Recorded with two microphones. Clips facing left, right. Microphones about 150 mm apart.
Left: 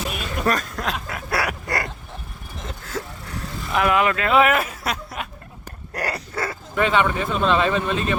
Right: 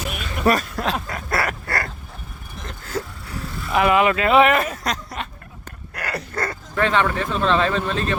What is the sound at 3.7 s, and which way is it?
Speech, centre (ahead or behind).